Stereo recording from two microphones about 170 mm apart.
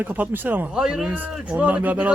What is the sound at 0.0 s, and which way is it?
A man's voice, 10° right (ahead or behind).